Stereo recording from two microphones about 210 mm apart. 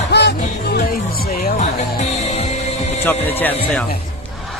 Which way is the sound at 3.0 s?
10° left (ahead or behind).